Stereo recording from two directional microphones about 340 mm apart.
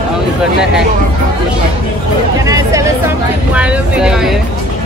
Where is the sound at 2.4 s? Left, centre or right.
Centre.